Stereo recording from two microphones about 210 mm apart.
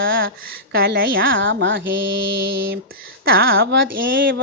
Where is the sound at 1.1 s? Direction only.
65° right (ahead or behind).